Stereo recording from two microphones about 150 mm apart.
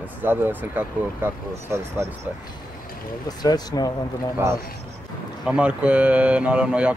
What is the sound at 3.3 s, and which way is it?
Speech, 25° left (ahead or behind).